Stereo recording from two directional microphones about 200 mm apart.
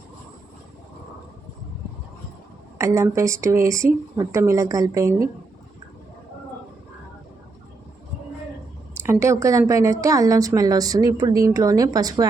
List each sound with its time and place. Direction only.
2.7 s a woman's voice: 15° right (ahead or behind)
9.0 s a woman's voice: 15° right (ahead or behind)